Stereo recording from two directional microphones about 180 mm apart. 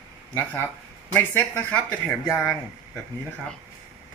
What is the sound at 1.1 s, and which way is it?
Speech, 10° left (ahead or behind).